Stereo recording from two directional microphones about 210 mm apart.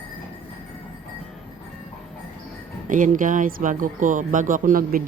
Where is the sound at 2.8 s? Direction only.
40° right (ahead or behind).